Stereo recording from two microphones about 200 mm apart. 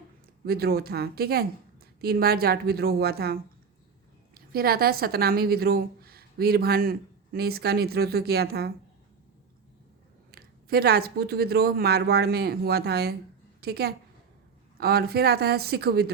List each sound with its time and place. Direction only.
0.4 s speech: 50° right (ahead or behind)
4.5 s speech: 50° right (ahead or behind)
10.3 s a woman's voice: 50° right (ahead or behind)